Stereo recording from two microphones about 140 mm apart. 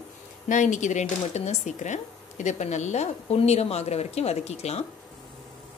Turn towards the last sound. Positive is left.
turn(degrees=50)  # may be behind; listen again after turning